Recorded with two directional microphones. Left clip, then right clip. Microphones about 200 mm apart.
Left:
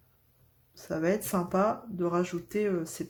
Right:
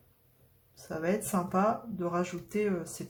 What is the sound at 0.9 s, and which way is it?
Speech, 40° left (ahead or behind).